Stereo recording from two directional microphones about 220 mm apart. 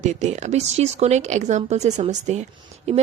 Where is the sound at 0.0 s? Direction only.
30° right (ahead or behind).